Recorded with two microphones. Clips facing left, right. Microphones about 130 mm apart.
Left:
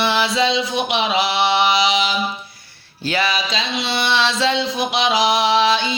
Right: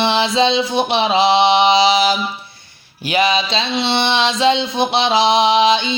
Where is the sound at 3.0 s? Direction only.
20° right (ahead or behind).